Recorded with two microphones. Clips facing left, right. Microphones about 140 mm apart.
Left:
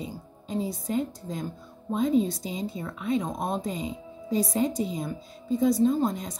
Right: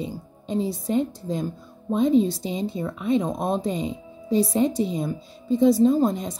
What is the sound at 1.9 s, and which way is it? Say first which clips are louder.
Speech: right 5 dB; 25° right (ahead or behind).